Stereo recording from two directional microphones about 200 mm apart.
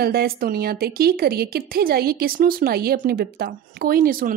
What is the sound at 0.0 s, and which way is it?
Speech, 50° right (ahead or behind).